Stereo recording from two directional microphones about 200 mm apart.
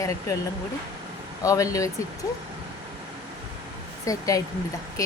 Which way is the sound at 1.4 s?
15° left (ahead or behind).